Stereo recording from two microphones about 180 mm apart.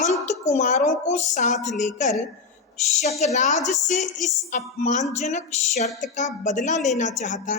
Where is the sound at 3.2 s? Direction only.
40° left (ahead or behind).